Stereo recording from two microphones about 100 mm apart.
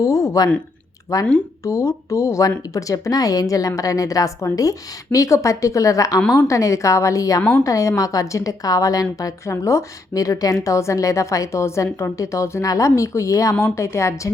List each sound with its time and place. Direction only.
0.0 s a woman's voice: 30° left (ahead or behind)